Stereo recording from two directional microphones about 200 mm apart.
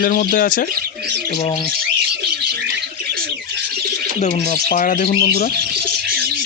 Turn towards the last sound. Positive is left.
turn(degrees=45)  # may be behind; listen again after turning